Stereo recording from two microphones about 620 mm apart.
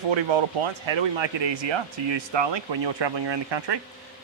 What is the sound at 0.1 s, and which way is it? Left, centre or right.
Speech, right.